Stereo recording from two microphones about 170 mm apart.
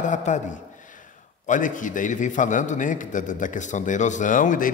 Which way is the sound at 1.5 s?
50° left (ahead or behind).